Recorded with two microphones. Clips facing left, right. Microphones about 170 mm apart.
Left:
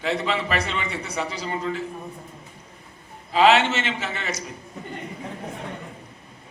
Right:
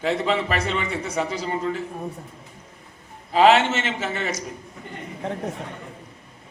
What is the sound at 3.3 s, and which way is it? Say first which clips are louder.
A man's voice: right 1 dB; 45° right (ahead or behind).